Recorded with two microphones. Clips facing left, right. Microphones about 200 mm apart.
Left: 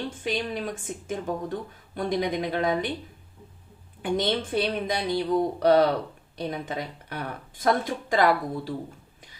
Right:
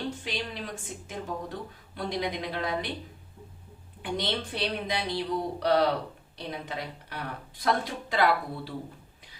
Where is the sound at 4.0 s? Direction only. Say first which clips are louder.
Left 6 dB; 50° left (ahead or behind).